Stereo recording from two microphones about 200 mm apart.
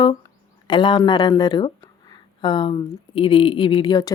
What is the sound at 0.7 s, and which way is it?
Speech, 25° left (ahead or behind).